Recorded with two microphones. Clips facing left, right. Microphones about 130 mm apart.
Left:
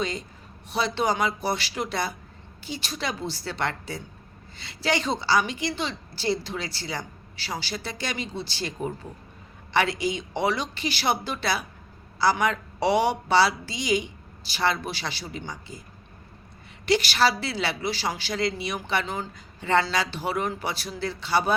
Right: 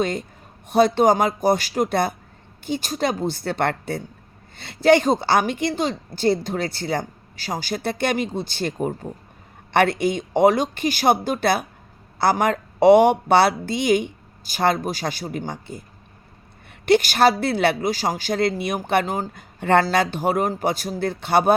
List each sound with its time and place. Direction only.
0.0 s a woman's voice: 55° right (ahead or behind)
16.8 s a woman's voice: 50° right (ahead or behind)